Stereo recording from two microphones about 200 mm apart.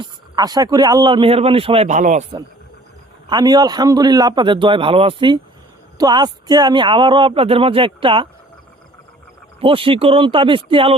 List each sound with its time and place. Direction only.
0.0 s speech: 20° right (ahead or behind); by 2.2 s 35° right (ahead or behind)
3.2 s speech: 20° right (ahead or behind)
9.6 s speech: 25° right (ahead or behind)